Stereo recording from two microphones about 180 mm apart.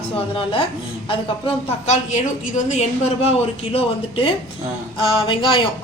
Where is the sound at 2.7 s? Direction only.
35° left (ahead or behind).